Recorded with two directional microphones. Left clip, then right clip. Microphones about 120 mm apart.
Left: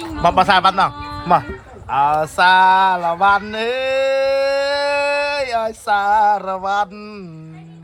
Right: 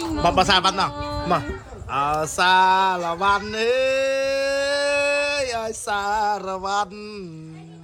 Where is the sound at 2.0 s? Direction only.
15° right (ahead or behind).